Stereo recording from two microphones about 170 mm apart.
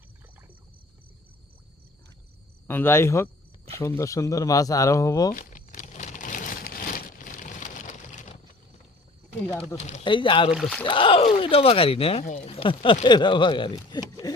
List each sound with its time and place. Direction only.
2.6 s speech: 15° left (ahead or behind)
5.3 s crumpling: 50° left (ahead or behind)
9.5 s speech: 10° left (ahead or behind)
9.7 s speech: 40° left (ahead or behind)
10.0 s speech: 30° left (ahead or behind)
10.5 s speech: centre (ahead or behind)
10.8 s speech: 30° left (ahead or behind)